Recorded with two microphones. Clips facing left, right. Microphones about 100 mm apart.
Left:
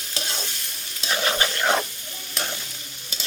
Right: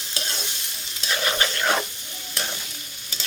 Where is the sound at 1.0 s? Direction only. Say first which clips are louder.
Left 1 dB; 20° left (ahead or behind).